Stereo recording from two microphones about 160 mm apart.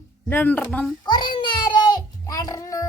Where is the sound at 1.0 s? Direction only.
30° left (ahead or behind).